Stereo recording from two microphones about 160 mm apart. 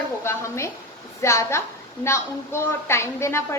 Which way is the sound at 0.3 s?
15° left (ahead or behind).